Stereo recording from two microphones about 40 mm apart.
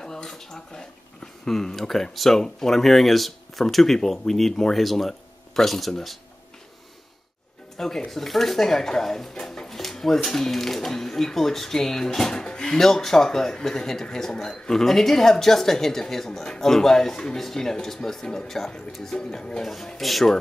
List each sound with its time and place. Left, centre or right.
0.0 s speech: centre
7.7 s speech: centre
19.1 s speech: centre